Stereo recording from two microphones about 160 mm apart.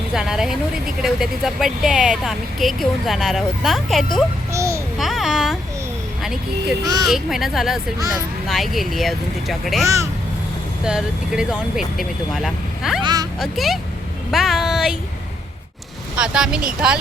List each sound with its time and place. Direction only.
0.1 s speech: 5° right (ahead or behind)
4.5 s a child's voice: 20° right (ahead or behind)
4.9 s babbling: centre (ahead or behind)
6.2 s speech: 5° right (ahead or behind)
6.8 s speech: 25° right (ahead or behind)
7.1 s speech: centre (ahead or behind)
9.8 s speech: 20° right (ahead or behind)
10.8 s speech: 5° right (ahead or behind)
13.0 s speech: 25° right (ahead or behind)
13.4 s speech: centre (ahead or behind)
16.1 s speech: 5° right (ahead or behind)